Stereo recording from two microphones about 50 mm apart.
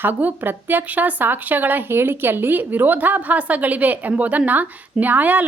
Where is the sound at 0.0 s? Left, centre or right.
Right.